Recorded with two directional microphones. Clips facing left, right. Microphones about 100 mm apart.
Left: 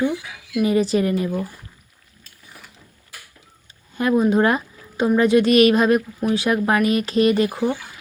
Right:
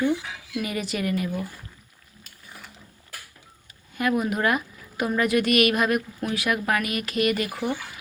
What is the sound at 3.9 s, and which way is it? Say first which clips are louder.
Speech: left 7 dB; 30° left (ahead or behind).